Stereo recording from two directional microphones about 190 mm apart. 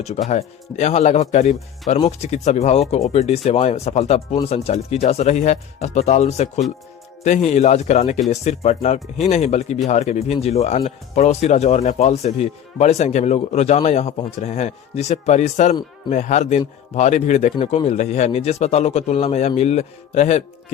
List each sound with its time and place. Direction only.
0.3 s speech: 35° left (ahead or behind)
9.0 s speech: centre (ahead or behind)
9.3 s speech: 35° left (ahead or behind)